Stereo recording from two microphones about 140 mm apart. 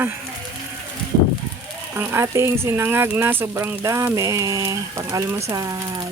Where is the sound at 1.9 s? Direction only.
15° right (ahead or behind).